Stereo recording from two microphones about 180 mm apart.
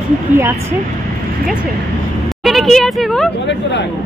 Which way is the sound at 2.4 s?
Centre (ahead or behind).